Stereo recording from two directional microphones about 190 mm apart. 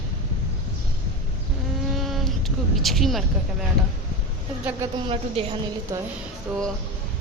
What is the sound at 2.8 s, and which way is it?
Speech, centre (ahead or behind).